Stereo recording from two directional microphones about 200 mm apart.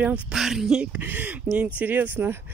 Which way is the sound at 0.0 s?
5° right (ahead or behind).